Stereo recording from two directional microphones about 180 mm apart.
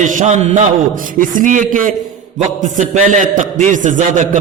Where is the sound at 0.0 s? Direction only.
40° right (ahead or behind).